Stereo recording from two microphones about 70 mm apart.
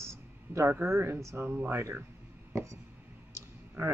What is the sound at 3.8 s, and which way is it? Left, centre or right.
Speech, right.